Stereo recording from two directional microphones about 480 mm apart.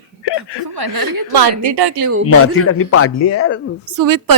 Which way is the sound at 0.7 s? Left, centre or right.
Right.